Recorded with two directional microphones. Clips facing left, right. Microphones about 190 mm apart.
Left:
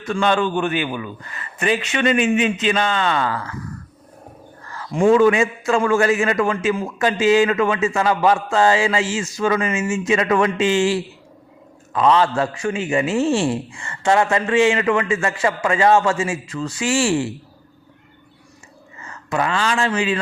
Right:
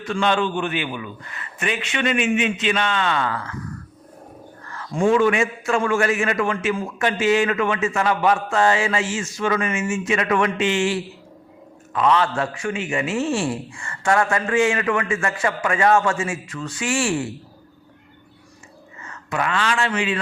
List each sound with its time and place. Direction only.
0.1 s a man's voice: 45° left (ahead or behind)
5.0 s a man's voice: 35° left (ahead or behind)
11.9 s a man's voice: 30° left (ahead or behind)
19.0 s speech: 30° left (ahead or behind)